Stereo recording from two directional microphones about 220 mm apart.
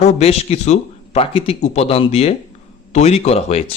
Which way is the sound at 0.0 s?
30° left (ahead or behind).